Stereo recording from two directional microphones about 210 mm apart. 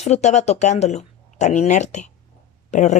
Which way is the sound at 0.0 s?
30° left (ahead or behind).